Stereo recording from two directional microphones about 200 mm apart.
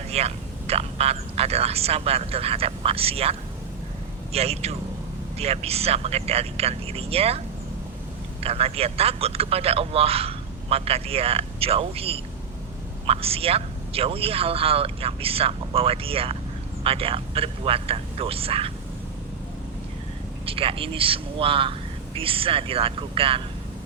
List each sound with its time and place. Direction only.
0.1 s a man's voice: 30° right (ahead or behind)
20.4 s a man's voice: 25° right (ahead or behind)